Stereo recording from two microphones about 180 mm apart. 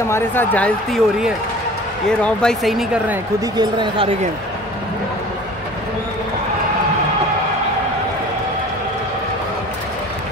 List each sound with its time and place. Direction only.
0.1 s speech: 10° left (ahead or behind)
2.0 s speech: 5° left (ahead or behind)
3.5 s speech: 25° right (ahead or behind)